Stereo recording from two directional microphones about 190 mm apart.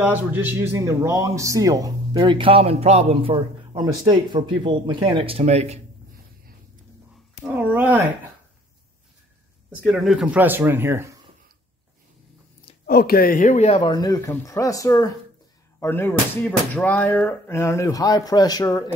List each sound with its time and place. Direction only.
0.0 s a man's voice: 10° right (ahead or behind); by 5.8 s 35° right (ahead or behind)
7.4 s speech: 10° right (ahead or behind)
9.8 s speech: centre (ahead or behind)
12.8 s a man's voice: 55° left (ahead or behind); by 18.9 s 20° left (ahead or behind)